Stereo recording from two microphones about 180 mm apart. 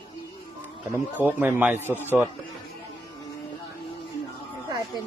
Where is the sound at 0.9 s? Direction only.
10° right (ahead or behind).